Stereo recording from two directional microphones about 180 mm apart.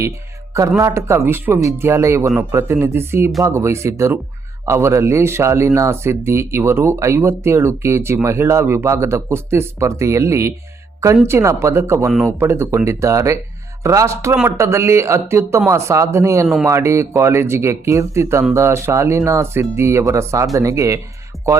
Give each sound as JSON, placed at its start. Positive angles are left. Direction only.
{"t": 0.8, "sound": "speech", "side_deg": -15}